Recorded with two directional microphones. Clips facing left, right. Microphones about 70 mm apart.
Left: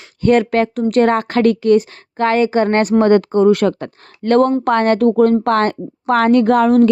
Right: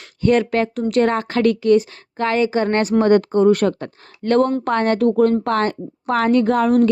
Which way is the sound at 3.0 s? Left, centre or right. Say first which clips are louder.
Left 1 dB; left.